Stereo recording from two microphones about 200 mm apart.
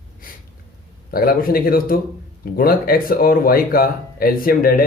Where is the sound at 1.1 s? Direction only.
50° left (ahead or behind).